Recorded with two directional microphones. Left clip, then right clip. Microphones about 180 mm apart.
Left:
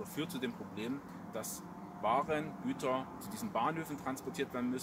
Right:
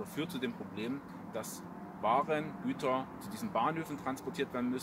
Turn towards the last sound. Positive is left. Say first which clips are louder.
# right 2 dB
turn(degrees=-10)  # may be behind; listen again after turning